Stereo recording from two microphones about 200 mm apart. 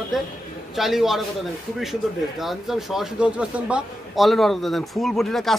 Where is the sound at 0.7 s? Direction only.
Centre (ahead or behind).